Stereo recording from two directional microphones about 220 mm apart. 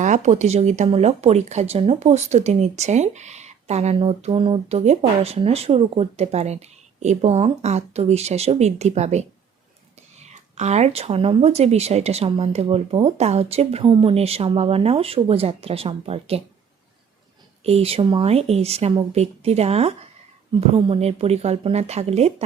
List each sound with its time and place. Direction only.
0.0 s speech: 35° right (ahead or behind)
17.6 s speech: 25° right (ahead or behind)